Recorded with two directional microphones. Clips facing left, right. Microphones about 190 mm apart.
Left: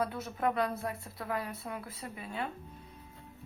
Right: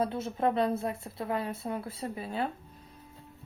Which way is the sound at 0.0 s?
25° right (ahead or behind).